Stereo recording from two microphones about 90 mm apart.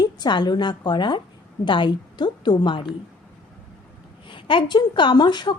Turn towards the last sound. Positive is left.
turn(degrees=55)  # may be behind; listen again after turning